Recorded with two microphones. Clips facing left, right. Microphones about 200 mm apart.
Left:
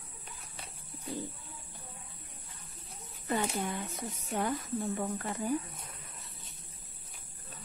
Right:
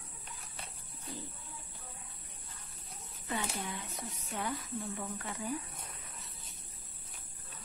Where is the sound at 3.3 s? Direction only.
50° left (ahead or behind).